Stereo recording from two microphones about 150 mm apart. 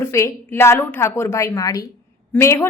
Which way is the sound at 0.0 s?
20° left (ahead or behind).